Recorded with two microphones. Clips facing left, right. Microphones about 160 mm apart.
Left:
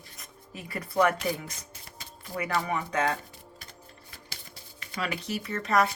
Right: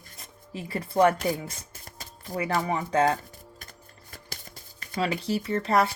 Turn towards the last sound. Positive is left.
turn(degrees=-30)  # may be behind; listen again after turning